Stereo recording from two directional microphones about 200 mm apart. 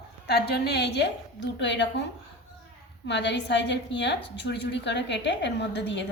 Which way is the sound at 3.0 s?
60° left (ahead or behind).